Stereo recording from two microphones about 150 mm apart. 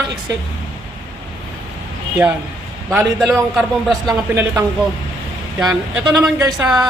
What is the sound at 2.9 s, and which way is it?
Speech, 20° right (ahead or behind).